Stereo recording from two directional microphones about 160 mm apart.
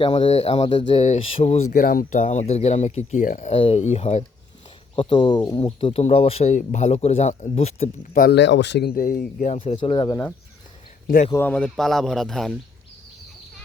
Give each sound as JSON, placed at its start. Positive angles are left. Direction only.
{"t": 0.0, "sound": "speech", "side_deg": 35}
{"t": 0.7, "sound": "speech", "side_deg": 30}
{"t": 1.0, "sound": "speech", "side_deg": 45}
{"t": 1.8, "sound": "speech", "side_deg": 60}
{"t": 8.1, "sound": "speech", "side_deg": 75}
{"t": 9.6, "sound": "speech", "side_deg": 35}
{"t": 11.3, "sound": "speech", "side_deg": 10}